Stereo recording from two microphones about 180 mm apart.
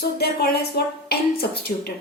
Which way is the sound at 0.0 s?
65° left (ahead or behind).